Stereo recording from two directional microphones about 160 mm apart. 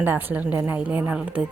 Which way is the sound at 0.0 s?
10° right (ahead or behind).